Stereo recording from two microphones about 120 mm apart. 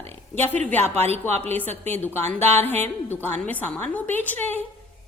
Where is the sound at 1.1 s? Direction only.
60° right (ahead or behind).